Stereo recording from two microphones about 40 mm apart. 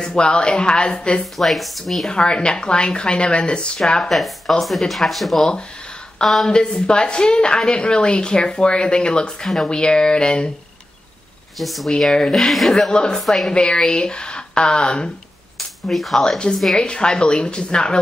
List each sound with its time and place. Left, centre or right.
0.0 s speech: left
1.4 s speech: centre
2.0 s speech: left
4.1 s speech: centre
6.5 s speech: left
11.5 s speech: centre
12.1 s speech: centre
13.5 s speech: left
15.9 s speech: centre
16.2 s speech: centre